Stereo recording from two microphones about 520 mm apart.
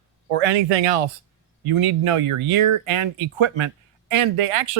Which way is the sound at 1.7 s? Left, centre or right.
Right.